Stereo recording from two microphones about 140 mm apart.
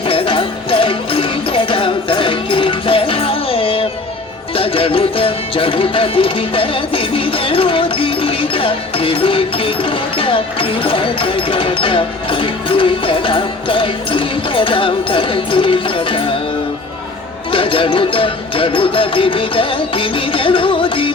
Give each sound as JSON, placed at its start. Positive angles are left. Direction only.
{"t": 0.1, "sound": "music", "side_deg": 40}
{"t": 17.5, "sound": "music", "side_deg": 40}